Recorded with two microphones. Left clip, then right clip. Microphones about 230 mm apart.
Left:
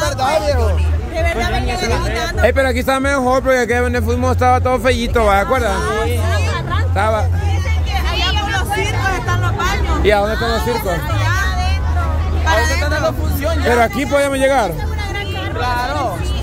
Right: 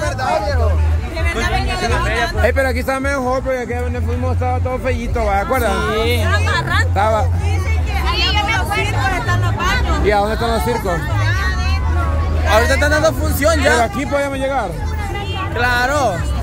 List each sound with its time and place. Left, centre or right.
0.0 s hubbub: left
1.4 s music: centre
2.0 s speech: centre
5.5 s speech: centre
5.9 s speech: right
7.0 s speech: centre
8.2 s vehicle: centre
8.5 s hubbub: centre
10.2 s speech: centre
12.5 s speech: right
13.7 s speech: centre
15.6 s vehicle: right